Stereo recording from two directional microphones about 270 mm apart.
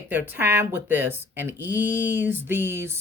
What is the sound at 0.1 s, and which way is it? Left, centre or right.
Speech, centre.